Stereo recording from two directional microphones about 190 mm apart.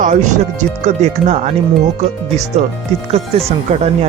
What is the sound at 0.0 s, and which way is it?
Speech, 40° right (ahead or behind).